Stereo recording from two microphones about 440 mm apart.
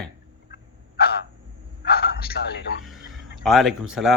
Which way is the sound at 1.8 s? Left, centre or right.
Left.